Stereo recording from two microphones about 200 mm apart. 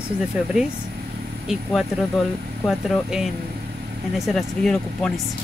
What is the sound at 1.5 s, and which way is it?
Speech, centre (ahead or behind).